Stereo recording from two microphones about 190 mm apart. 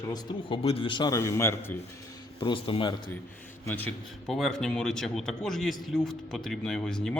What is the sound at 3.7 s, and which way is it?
A man's voice, 10° left (ahead or behind).